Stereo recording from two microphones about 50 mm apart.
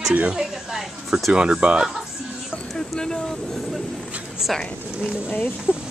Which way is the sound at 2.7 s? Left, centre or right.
Centre.